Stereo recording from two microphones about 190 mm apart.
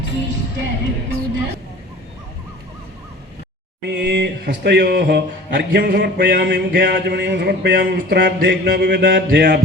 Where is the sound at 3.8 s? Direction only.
60° right (ahead or behind).